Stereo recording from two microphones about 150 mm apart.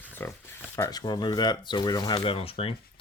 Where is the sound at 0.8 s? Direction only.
25° left (ahead or behind).